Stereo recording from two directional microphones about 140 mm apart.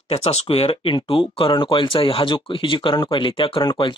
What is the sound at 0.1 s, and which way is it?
Speech, 45° left (ahead or behind).